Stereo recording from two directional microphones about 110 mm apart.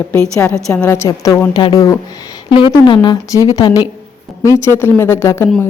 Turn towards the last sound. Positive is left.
turn(degrees=25)  # may be behind; listen again after turning